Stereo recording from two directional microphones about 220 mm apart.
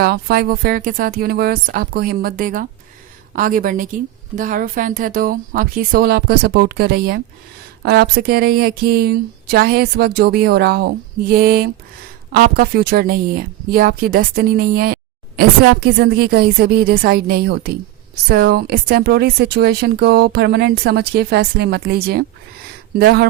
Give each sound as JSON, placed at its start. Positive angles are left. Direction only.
{"t": 0.0, "sound": "speech", "side_deg": -45}